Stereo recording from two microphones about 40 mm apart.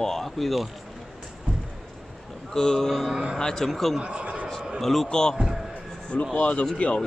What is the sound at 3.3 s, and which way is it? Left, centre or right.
Speech, centre.